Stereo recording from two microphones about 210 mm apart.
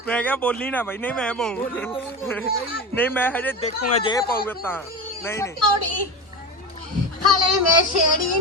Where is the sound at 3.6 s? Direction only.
30° left (ahead or behind).